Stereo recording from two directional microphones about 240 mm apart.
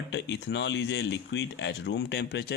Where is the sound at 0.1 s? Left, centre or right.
Left.